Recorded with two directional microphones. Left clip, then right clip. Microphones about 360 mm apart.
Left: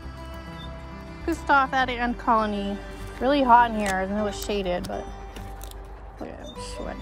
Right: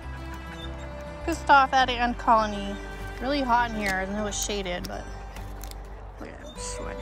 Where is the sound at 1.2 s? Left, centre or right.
Centre.